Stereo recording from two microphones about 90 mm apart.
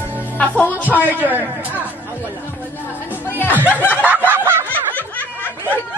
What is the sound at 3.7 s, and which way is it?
Snicker, 20° left (ahead or behind).